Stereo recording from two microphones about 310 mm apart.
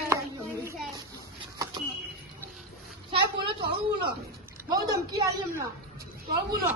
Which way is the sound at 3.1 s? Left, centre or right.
Centre.